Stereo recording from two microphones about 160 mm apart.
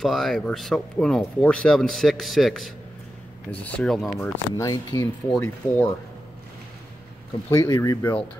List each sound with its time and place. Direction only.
0.0 s speech: centre (ahead or behind)
7.5 s speech: 20° left (ahead or behind)